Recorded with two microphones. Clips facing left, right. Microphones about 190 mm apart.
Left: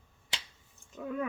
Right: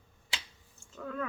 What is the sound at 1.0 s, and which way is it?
Speech, 15° left (ahead or behind).